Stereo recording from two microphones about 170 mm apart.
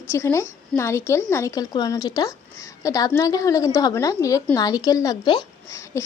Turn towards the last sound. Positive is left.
turn(degrees=15)  # may be behind; listen again after turning